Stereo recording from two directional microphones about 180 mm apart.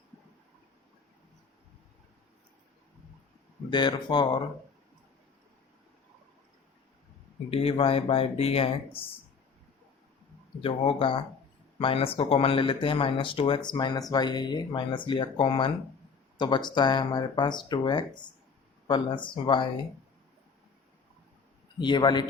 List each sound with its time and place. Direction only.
3.7 s speech: 25° left (ahead or behind)
7.5 s speech: 30° left (ahead or behind)
10.6 s speech: 30° left (ahead or behind)
21.8 s speech: 25° left (ahead or behind)